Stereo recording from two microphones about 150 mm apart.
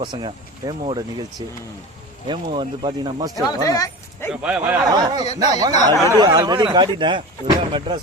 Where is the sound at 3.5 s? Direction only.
25° left (ahead or behind).